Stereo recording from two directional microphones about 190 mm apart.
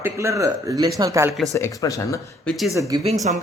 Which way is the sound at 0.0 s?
15° right (ahead or behind).